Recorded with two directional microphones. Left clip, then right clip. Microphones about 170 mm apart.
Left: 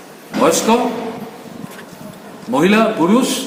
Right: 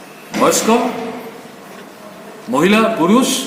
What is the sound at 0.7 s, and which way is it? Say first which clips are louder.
Speech: even; 10° left (ahead or behind).